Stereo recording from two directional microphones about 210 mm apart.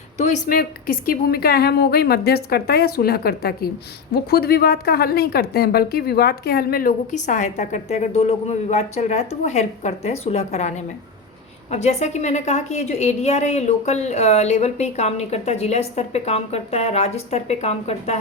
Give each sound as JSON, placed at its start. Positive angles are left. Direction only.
{"t": 0.4, "sound": "a woman's voice", "side_deg": 40}